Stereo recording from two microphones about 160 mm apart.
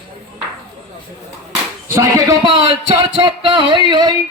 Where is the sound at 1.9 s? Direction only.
20° right (ahead or behind).